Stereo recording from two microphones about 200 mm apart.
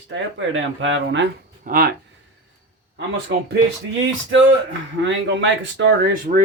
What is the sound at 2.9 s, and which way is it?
Speech, 60° right (ahead or behind).